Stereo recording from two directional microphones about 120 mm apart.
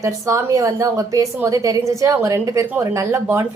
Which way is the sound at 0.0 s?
25° right (ahead or behind).